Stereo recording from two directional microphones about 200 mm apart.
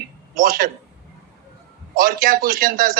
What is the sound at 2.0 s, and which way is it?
A man's voice, 45° right (ahead or behind).